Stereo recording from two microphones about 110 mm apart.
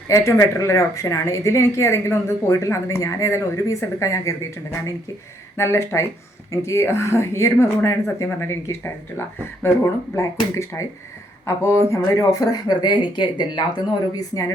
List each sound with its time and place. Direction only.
0.1 s speech: 30° left (ahead or behind)
5.5 s speech: 25° left (ahead or behind)